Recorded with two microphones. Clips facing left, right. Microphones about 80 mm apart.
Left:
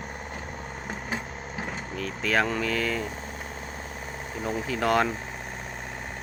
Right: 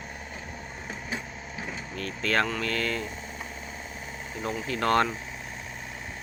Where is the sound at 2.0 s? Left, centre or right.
Centre.